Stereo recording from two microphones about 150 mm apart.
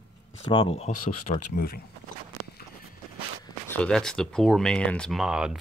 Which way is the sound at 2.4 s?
25° right (ahead or behind).